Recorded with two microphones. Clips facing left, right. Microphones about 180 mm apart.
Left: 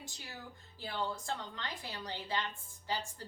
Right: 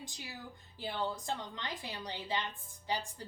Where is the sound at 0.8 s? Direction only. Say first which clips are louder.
Right 1 dB; 15° right (ahead or behind).